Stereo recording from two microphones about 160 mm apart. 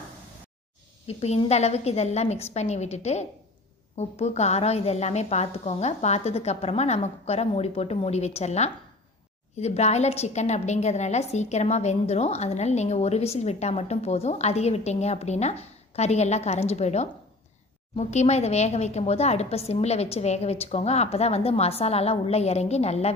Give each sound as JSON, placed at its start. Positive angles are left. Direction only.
{"t": 1.0, "sound": "a woman's voice", "side_deg": 40}